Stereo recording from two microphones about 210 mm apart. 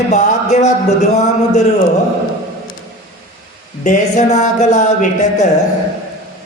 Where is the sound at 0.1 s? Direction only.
35° left (ahead or behind).